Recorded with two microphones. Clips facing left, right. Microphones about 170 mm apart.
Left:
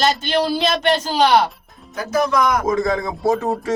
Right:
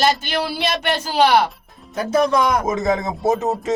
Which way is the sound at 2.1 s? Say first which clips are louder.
Right 1 dB; 30° right (ahead or behind).